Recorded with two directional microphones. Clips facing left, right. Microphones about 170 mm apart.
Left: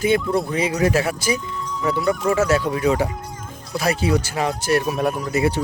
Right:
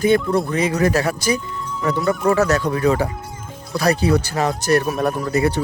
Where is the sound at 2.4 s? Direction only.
40° right (ahead or behind).